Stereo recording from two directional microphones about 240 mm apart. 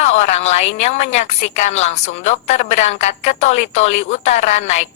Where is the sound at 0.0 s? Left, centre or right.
Left.